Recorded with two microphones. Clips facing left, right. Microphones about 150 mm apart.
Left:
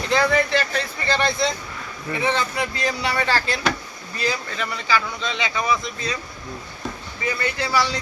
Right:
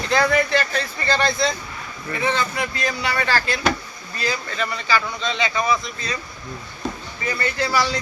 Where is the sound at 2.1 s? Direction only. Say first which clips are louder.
Even; 10° left (ahead or behind).